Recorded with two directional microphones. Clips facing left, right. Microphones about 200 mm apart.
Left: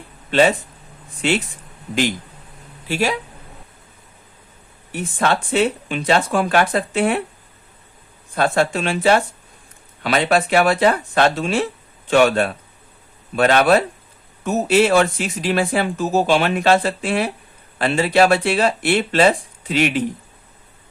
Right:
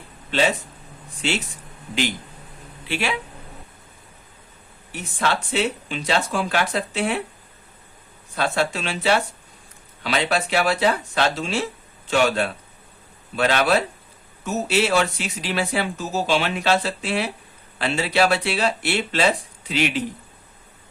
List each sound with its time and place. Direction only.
2.8 s speech: 40° left (ahead or behind)
4.9 s speech: 50° left (ahead or behind)
8.4 s speech: 50° left (ahead or behind)